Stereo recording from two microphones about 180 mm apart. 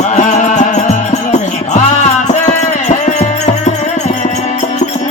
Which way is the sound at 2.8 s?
40° left (ahead or behind).